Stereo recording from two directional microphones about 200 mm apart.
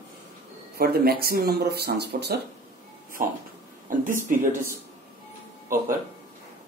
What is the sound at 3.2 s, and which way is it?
Speech, 45° right (ahead or behind).